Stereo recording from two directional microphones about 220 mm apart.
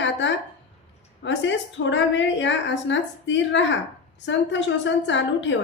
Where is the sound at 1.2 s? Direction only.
55° left (ahead or behind).